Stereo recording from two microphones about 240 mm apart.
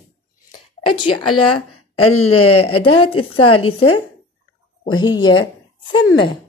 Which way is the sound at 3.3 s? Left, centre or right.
Left.